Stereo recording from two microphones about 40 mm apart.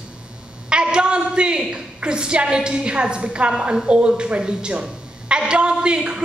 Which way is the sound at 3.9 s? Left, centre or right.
Right.